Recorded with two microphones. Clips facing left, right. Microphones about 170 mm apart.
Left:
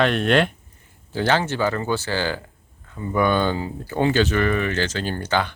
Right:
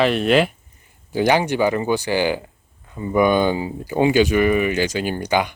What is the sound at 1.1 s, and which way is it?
Speech, 15° right (ahead or behind).